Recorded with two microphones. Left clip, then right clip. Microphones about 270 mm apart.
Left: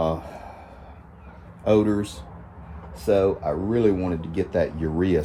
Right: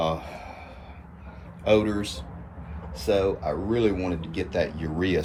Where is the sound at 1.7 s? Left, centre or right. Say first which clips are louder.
Left 2 dB; left.